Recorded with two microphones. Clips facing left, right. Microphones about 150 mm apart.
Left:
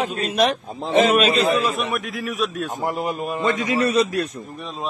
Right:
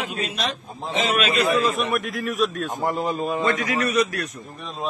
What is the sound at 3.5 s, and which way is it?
Speech, 25° left (ahead or behind).